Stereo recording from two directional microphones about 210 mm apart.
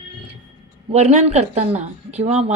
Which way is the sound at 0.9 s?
30° right (ahead or behind).